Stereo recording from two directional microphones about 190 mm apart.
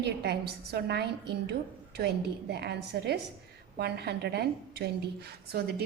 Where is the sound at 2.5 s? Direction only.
55° right (ahead or behind).